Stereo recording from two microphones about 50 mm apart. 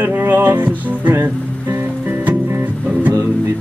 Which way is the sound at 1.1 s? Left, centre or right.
Right.